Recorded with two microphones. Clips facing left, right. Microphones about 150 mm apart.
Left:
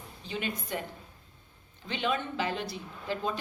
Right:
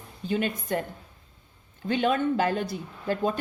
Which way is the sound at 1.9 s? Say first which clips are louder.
Right 8 dB; 50° right (ahead or behind).